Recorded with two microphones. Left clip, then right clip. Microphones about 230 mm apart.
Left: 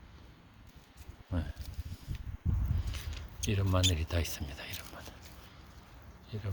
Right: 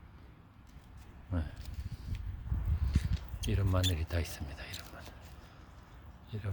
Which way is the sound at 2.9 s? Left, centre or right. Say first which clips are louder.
Right 6 dB; centre.